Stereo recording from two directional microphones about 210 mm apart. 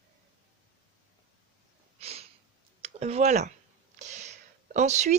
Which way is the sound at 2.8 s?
30° right (ahead or behind).